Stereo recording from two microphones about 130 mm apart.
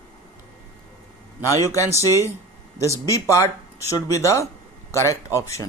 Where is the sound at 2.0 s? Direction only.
25° left (ahead or behind).